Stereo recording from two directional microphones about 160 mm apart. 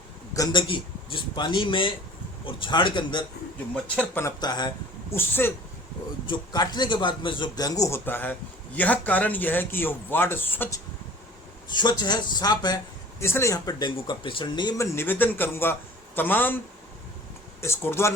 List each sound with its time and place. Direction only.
0.3 s a man's voice: 25° left (ahead or behind)
3.9 s a man's voice: 15° left (ahead or behind)
5.1 s speech: 15° left (ahead or behind)
6.2 s speech: 25° left (ahead or behind)
11.7 s a man's voice: 30° left (ahead or behind); by 16.6 s 10° left (ahead or behind)
17.6 s speech: 15° left (ahead or behind)